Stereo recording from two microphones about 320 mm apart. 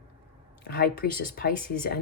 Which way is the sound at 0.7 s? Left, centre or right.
Left.